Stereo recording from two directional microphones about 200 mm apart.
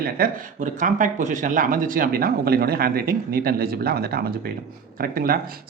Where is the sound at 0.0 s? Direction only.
45° right (ahead or behind).